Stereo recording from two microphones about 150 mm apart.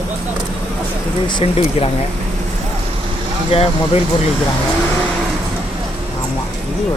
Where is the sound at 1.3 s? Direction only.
35° left (ahead or behind).